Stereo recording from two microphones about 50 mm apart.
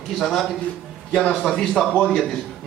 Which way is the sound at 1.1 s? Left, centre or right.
Centre.